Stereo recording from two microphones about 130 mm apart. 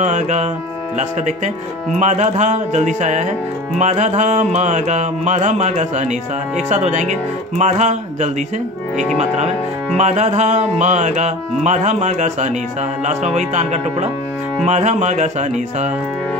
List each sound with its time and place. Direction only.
0.0 s speech: 65° right (ahead or behind)